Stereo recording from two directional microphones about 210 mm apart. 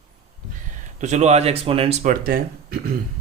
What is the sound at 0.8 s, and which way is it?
Speech, 35° right (ahead or behind).